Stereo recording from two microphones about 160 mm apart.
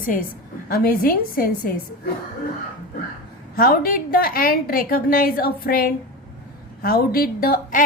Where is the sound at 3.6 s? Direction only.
65° left (ahead or behind).